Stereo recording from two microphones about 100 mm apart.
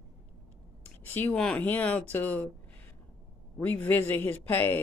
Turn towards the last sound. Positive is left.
turn(degrees=20)  # may be behind; listen again after turning